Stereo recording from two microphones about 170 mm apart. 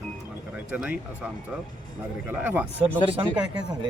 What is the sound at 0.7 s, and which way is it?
Speech, 10° right (ahead or behind).